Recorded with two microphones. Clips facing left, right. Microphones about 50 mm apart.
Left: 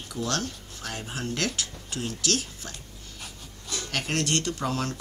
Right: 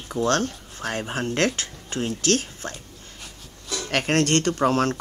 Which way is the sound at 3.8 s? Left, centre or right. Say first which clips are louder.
Right 7 dB; right.